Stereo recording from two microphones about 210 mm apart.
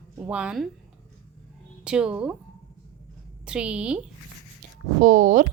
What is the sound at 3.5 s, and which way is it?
Speech, 5° right (ahead or behind).